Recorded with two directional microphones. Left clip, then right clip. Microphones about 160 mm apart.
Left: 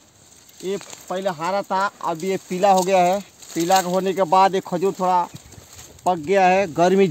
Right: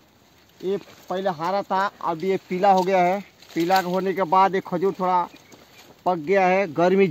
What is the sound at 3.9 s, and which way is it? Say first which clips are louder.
Speech: left 2 dB; 45° left (ahead or behind).